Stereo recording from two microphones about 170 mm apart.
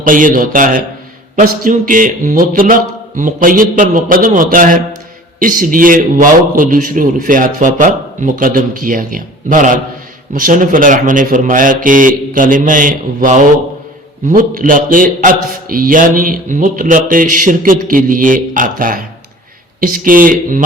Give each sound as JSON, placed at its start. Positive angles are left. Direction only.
{"t": 0.0, "sound": "a man's voice", "side_deg": -50}